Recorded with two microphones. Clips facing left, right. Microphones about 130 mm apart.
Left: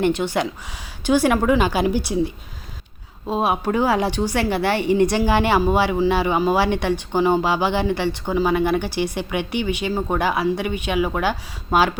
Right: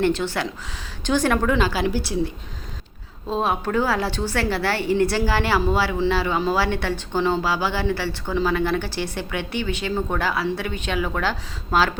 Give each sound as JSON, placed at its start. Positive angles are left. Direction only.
{"t": 0.0, "sound": "a woman's voice", "side_deg": 15}